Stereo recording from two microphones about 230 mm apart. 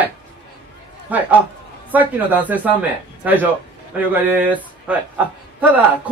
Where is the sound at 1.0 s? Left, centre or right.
Centre.